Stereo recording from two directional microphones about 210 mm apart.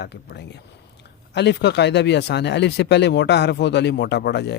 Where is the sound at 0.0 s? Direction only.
55° left (ahead or behind).